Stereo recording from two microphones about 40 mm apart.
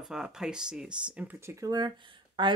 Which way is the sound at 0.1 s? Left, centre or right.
Centre.